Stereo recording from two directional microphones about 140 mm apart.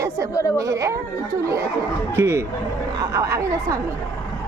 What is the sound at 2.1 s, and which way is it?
Speech, 20° right (ahead or behind).